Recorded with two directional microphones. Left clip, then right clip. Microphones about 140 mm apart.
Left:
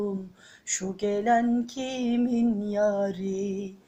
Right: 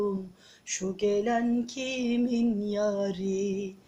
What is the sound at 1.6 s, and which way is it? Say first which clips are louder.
Music: left 1 dB; 20° right (ahead or behind).